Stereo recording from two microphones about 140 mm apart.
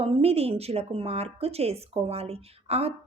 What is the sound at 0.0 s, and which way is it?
A woman's voice, 45° right (ahead or behind).